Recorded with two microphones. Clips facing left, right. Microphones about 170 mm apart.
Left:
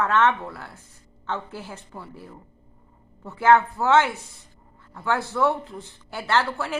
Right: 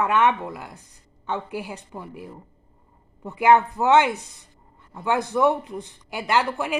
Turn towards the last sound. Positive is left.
turn(degrees=-15)  # may be behind; listen again after turning